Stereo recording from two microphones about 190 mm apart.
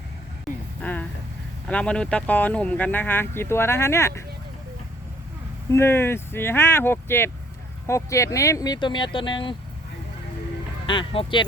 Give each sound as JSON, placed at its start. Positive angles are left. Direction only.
{"t": 0.8, "sound": "a sound", "side_deg": 10}
{"t": 1.6, "sound": "speech", "side_deg": 5}
{"t": 5.7, "sound": "speech", "side_deg": 10}
{"t": 10.8, "sound": "speech", "side_deg": 25}